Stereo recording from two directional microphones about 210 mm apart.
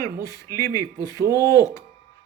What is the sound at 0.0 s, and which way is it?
A man's voice, 15° left (ahead or behind).